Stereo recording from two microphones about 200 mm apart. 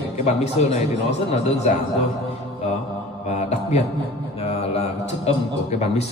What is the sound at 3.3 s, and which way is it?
Mantra, 35° left (ahead or behind).